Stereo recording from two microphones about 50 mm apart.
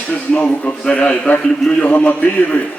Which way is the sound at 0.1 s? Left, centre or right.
Left.